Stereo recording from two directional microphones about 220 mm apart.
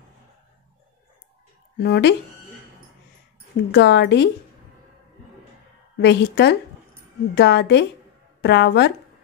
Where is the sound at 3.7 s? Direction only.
50° left (ahead or behind).